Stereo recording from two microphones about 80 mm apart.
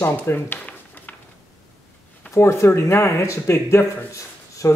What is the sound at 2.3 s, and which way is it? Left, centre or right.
Speech, left.